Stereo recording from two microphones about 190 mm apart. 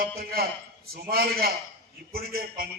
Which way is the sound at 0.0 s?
55° right (ahead or behind).